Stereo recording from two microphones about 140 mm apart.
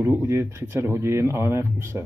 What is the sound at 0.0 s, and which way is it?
Speech, 20° right (ahead or behind).